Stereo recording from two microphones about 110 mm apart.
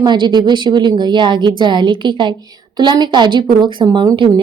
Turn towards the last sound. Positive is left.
turn(degrees=-45)  # may be behind; listen again after turning